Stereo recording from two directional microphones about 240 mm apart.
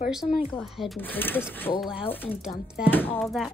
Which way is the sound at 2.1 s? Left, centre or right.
Centre.